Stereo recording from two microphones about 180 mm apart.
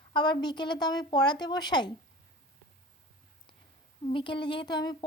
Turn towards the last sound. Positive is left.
turn(degrees=25)  # may be behind; listen again after turning